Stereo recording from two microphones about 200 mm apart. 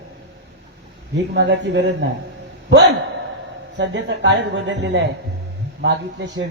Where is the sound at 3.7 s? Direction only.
65° right (ahead or behind).